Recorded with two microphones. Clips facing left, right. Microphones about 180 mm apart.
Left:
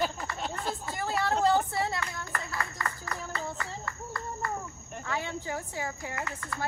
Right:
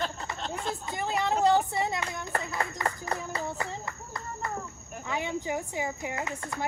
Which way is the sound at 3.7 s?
20° right (ahead or behind).